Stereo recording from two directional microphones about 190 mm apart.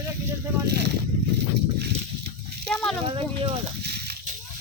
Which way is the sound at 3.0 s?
30° right (ahead or behind).